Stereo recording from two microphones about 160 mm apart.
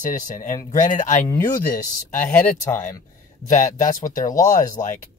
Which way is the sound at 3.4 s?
50° left (ahead or behind).